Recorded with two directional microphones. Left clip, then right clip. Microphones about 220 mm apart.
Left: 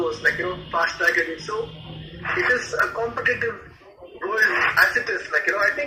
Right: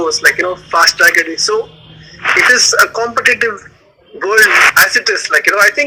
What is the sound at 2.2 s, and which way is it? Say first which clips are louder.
A man's voice: right 13 dB; 45° right (ahead or behind).